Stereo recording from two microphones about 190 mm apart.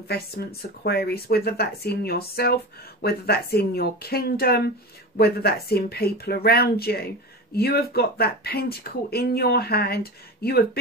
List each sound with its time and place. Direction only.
0.1 s speech: 55° left (ahead or behind)